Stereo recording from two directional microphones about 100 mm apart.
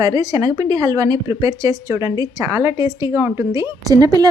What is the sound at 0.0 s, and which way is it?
Speech, 40° right (ahead or behind).